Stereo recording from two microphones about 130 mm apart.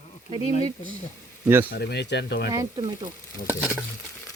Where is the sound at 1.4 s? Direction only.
15° right (ahead or behind).